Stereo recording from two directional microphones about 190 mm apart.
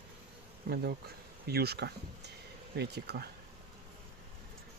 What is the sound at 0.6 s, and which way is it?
Speech, 55° right (ahead or behind).